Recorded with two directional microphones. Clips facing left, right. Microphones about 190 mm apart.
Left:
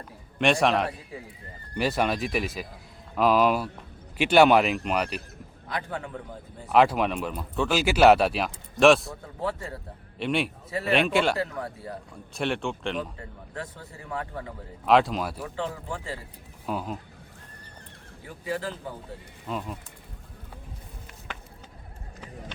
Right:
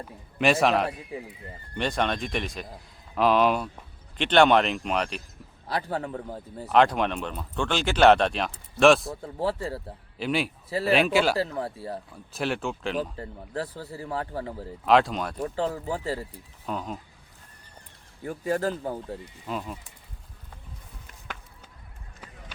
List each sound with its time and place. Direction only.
0.3 s speech: 5° right (ahead or behind)
5.6 s a man's voice: 35° right (ahead or behind)
6.7 s speech: 5° left (ahead or behind)
9.4 s a man's voice: 30° right (ahead or behind)
10.2 s speech: centre (ahead or behind)
11.3 s speech: 30° right (ahead or behind)
12.3 s speech: centre (ahead or behind)
13.0 s a man's voice: 35° right (ahead or behind)
14.8 s speech: centre (ahead or behind)
15.4 s a man's voice: 40° right (ahead or behind)
16.6 s speech: 5° left (ahead or behind)
18.3 s speech: 45° right (ahead or behind)
19.5 s speech: centre (ahead or behind)